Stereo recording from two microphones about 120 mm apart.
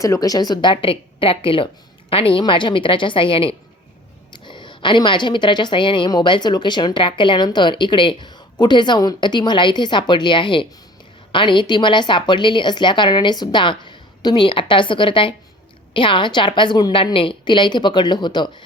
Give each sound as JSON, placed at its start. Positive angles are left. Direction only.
{"t": 0.0, "sound": "a woman's voice", "side_deg": 30}